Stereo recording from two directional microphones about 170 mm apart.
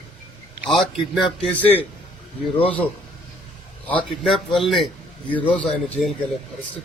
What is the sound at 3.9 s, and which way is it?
A man's voice, 5° left (ahead or behind).